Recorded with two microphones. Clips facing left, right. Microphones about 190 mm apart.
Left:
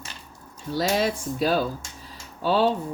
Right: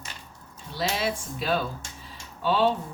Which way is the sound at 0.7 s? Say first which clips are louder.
Left 5 dB; 40° left (ahead or behind).